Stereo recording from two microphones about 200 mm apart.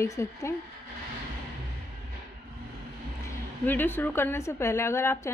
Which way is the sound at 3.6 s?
10° left (ahead or behind).